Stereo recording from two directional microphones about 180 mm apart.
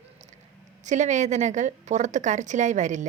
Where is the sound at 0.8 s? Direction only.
40° right (ahead or behind).